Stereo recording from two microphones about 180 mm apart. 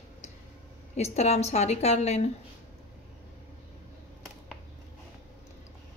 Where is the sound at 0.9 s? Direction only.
35° left (ahead or behind).